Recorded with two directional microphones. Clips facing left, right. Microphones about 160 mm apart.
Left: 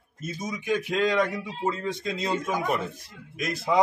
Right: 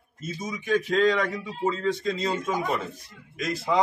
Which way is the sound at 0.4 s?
10° left (ahead or behind).